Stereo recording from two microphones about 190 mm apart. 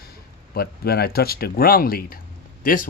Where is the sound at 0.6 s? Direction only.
55° left (ahead or behind).